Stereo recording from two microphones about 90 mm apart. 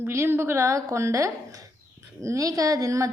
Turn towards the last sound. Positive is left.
turn(degrees=-40)  # may be behind; listen again after turning